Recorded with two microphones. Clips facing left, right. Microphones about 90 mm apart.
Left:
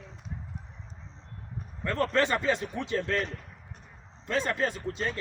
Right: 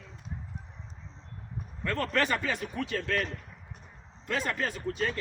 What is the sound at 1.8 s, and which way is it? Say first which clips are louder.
A woman's voice: left 3 dB; 25° left (ahead or behind).